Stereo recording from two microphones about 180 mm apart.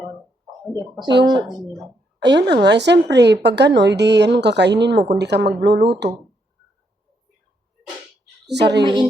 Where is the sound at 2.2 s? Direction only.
75° right (ahead or behind).